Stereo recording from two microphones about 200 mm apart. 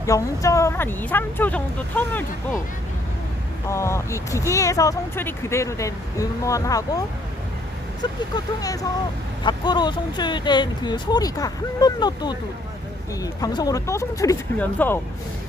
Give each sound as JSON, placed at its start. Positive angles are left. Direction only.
{"t": 0.0, "sound": "speech", "side_deg": 15}
{"t": 3.7, "sound": "speech", "side_deg": 15}
{"t": 8.6, "sound": "speech", "side_deg": 15}